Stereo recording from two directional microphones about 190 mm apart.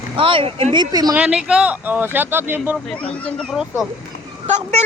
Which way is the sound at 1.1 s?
5° right (ahead or behind).